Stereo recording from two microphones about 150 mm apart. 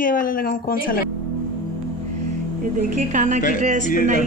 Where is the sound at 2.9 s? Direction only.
55° right (ahead or behind).